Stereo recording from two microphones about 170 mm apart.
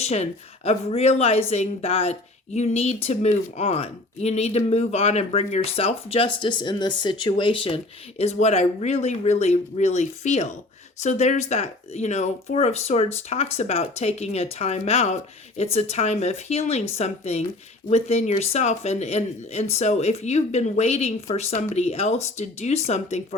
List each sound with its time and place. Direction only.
0.0 s speech: 40° left (ahead or behind)